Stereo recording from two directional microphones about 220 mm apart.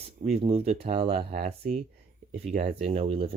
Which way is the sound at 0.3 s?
30° right (ahead or behind).